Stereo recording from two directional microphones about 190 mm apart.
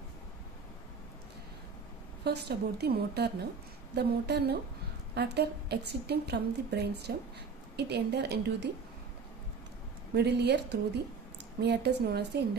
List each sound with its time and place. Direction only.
2.2 s a woman's voice: 60° right (ahead or behind)
10.1 s a woman's voice: 60° right (ahead or behind)